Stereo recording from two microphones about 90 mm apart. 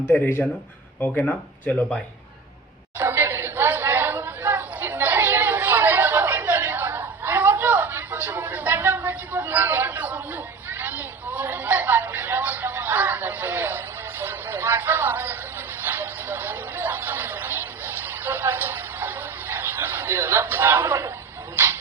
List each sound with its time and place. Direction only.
0.1 s speech: 15° left (ahead or behind)
3.0 s chatter: 25° right (ahead or behind)
15.8 s a sound: 25° right (ahead or behind)